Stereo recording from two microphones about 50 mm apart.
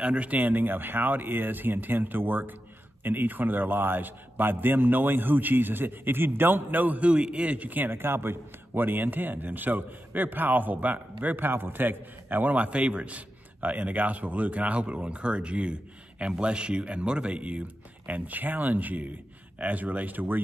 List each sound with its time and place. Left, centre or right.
0.0 s a man's voice: right